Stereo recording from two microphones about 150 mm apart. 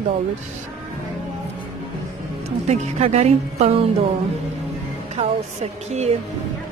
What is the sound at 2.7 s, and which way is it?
Speech, 50° right (ahead or behind).